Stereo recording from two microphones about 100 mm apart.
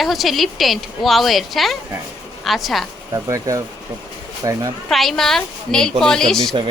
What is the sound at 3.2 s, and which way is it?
Speech, 30° right (ahead or behind).